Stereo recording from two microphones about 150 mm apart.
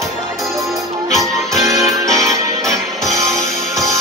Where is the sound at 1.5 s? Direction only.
20° right (ahead or behind).